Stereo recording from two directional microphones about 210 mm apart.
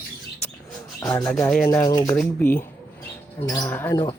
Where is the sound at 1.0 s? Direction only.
15° left (ahead or behind).